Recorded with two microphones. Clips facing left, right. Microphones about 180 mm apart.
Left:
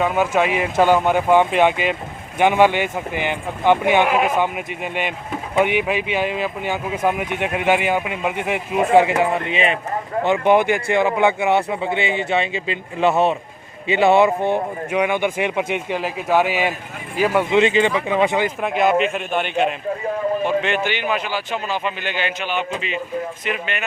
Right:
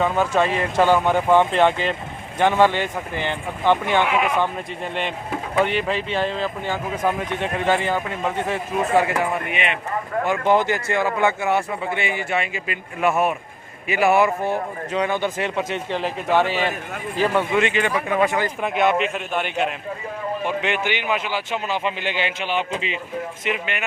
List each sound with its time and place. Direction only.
0.0 s speech: 10° left (ahead or behind)
4.0 s speech: 45° left (ahead or behind)
4.4 s speech: 10° left (ahead or behind)
14.8 s speech: 10° left (ahead or behind)
17.6 s speech: 25° left (ahead or behind)
18.6 s a man's voice: centre (ahead or behind)
20.6 s a man's voice: 15° right (ahead or behind)
23.5 s speech: 15° right (ahead or behind)